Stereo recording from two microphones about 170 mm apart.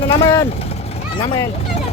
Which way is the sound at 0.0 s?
30° left (ahead or behind).